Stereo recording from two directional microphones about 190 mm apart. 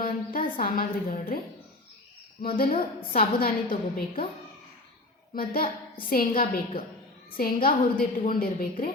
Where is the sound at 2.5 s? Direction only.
50° left (ahead or behind).